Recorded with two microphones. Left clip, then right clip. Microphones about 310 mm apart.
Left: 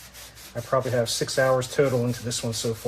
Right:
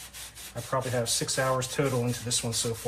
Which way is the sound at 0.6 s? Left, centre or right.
Centre.